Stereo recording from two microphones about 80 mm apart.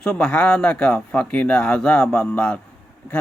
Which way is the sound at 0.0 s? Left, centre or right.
Centre.